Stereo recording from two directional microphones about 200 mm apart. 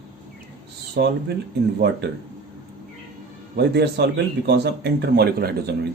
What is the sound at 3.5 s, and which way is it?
A man's voice, 55° right (ahead or behind).